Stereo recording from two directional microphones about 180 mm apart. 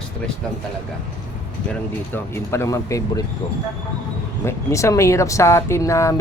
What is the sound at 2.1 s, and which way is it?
Speech, 10° left (ahead or behind).